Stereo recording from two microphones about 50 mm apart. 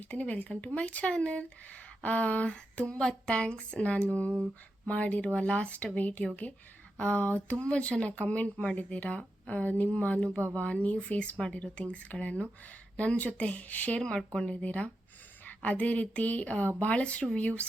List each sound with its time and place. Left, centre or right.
0.0 s speech: left
2.9 s speech: centre; by 13.9 s left
14.0 s speech: centre
14.6 s speech: left